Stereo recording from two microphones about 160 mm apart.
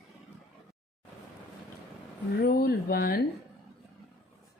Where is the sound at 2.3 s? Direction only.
65° left (ahead or behind).